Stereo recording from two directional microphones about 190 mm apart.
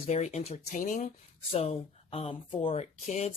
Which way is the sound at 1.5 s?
30° left (ahead or behind).